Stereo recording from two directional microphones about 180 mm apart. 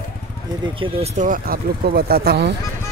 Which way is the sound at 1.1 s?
50° right (ahead or behind).